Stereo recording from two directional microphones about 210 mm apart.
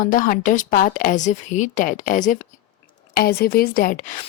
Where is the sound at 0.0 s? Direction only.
40° left (ahead or behind).